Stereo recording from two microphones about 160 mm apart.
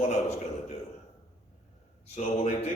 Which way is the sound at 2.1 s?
45° left (ahead or behind).